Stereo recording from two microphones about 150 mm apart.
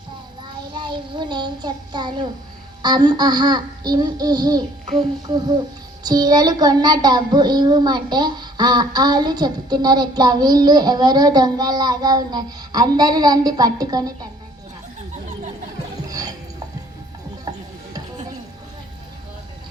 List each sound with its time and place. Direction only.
0.4 s child singing: 30° right (ahead or behind)
6.0 s child singing: 25° right (ahead or behind)
16.0 s music: 25° right (ahead or behind)
17.5 s music: 25° right (ahead or behind)